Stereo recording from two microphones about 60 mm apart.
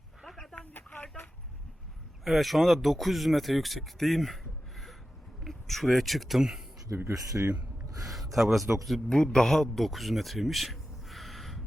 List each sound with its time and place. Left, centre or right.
0.3 s a sound: centre
2.2 s speech: centre
5.4 s speech: centre
6.9 s speech: right
8.0 s speech: centre
9.0 s a man's voice: centre